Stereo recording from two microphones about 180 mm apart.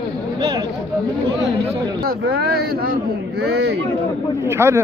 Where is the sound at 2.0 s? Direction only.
60° right (ahead or behind).